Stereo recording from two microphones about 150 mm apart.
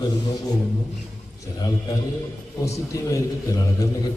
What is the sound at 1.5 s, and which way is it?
A man's voice, 25° left (ahead or behind).